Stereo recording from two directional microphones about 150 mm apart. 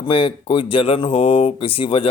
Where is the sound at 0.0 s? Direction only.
35° left (ahead or behind).